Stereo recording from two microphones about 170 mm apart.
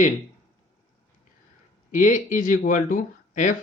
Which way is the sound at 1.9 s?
50° left (ahead or behind).